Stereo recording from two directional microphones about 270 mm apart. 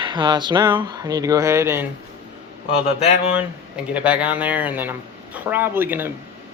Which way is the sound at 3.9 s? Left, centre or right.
Centre.